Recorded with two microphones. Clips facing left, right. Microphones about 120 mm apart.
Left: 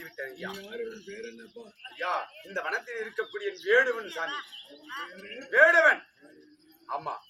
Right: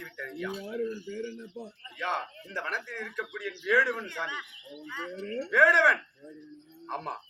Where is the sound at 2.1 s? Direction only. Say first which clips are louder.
Left 2 dB; 5° left (ahead or behind).